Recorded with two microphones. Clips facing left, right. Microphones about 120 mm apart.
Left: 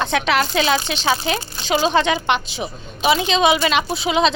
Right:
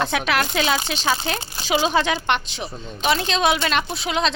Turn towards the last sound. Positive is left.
turn(degrees=5)  # may be behind; listen again after turning